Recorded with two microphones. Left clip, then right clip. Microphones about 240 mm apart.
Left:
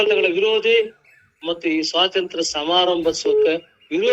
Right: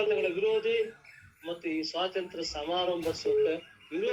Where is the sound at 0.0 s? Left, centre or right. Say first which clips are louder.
Left 11 dB; left.